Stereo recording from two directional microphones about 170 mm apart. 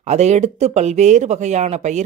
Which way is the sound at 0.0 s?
40° right (ahead or behind).